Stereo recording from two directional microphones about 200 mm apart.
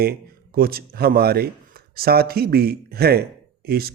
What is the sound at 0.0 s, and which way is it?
Speech, 50° right (ahead or behind).